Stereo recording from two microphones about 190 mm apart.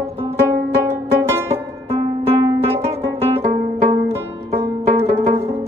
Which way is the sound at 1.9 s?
30° right (ahead or behind).